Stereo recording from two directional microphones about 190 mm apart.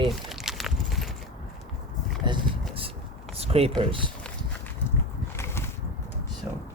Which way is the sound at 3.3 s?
30° right (ahead or behind).